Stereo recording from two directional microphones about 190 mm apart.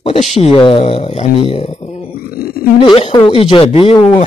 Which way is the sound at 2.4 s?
55° left (ahead or behind).